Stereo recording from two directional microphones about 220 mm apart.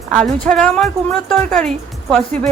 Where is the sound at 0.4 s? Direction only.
5° left (ahead or behind).